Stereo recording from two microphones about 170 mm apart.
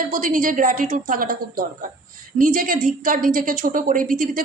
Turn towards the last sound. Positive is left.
turn(degrees=-55)  # may be behind; listen again after turning